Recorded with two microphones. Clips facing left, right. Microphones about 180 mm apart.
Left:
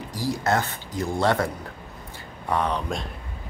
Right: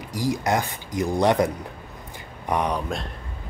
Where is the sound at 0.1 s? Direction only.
15° right (ahead or behind).